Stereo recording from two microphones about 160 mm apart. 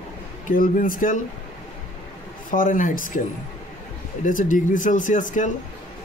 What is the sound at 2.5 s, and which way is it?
Speech, 60° left (ahead or behind).